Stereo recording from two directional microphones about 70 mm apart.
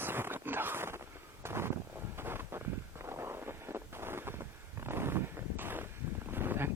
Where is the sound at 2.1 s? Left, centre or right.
Right.